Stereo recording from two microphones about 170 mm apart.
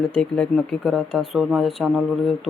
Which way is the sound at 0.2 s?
5° left (ahead or behind).